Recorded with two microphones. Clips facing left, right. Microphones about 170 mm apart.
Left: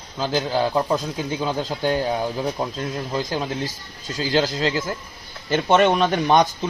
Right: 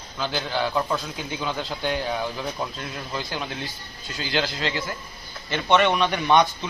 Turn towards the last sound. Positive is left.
turn(degrees=40)  # may be behind; listen again after turning